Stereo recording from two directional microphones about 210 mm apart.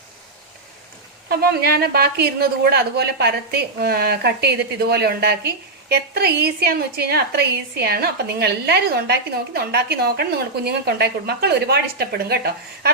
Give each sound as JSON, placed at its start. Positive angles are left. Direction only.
{"t": 1.3, "sound": "a woman's voice", "side_deg": -50}